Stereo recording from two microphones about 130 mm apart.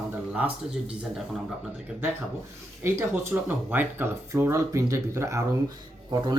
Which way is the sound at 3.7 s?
15° right (ahead or behind).